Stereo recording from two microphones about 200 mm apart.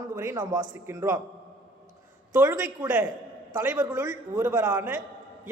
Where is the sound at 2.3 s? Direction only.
10° right (ahead or behind).